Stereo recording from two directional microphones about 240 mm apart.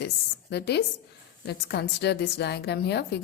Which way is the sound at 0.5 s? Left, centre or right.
Left.